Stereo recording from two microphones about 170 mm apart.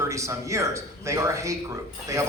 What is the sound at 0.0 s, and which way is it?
Speech, 15° right (ahead or behind).